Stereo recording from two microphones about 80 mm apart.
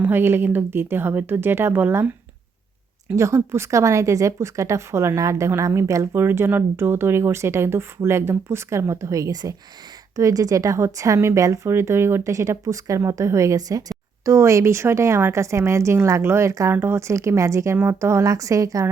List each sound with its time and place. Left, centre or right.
0.0 s speech: right
3.2 s speech: right
6.1 s a woman's voice: right
14.3 s a woman's voice: right